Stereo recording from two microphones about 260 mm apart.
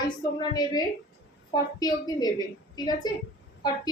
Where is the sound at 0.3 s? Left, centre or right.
Centre.